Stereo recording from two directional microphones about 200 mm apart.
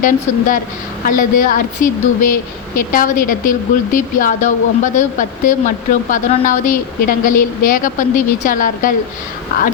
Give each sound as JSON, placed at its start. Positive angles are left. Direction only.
{"t": 0.0, "sound": "a woman's voice", "side_deg": 40}